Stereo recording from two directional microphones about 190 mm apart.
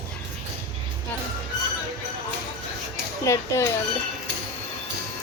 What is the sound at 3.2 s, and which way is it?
Speech, 15° left (ahead or behind).